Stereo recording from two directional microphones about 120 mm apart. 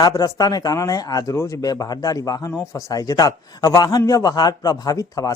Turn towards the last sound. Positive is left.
turn(degrees=30)  # may be behind; listen again after turning